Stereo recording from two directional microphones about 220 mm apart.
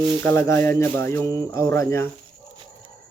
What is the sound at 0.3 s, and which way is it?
Speech, 10° left (ahead or behind).